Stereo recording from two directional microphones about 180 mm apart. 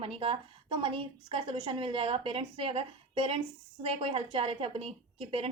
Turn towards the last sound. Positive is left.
turn(degrees=-30)  # may be behind; listen again after turning